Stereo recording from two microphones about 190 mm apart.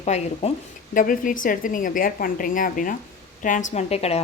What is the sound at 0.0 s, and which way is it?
A woman's voice, 35° left (ahead or behind).